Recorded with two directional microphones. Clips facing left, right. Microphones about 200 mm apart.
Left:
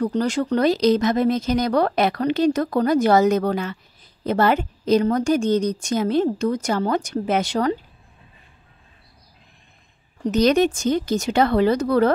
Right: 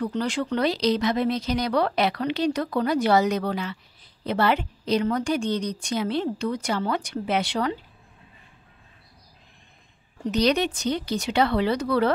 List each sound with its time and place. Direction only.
0.0 s speech: 40° left (ahead or behind)
10.2 s speech: 45° left (ahead or behind)